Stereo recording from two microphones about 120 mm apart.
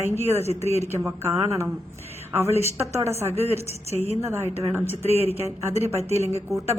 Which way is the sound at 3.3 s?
60° right (ahead or behind).